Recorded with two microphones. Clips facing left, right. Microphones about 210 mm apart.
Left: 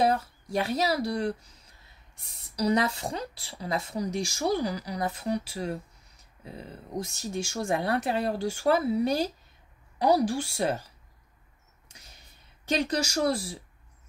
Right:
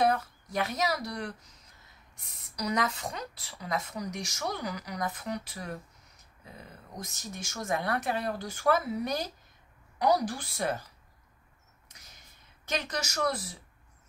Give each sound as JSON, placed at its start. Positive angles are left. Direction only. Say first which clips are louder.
{"t": 0.0, "sound": "a woman's voice", "louder": "left 2 dB", "side_deg": 30}
{"t": 12.6, "sound": "speech", "louder": "left 7 dB", "side_deg": 30}